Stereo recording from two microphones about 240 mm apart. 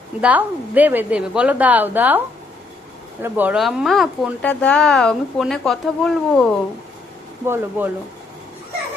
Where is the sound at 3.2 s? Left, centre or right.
Centre.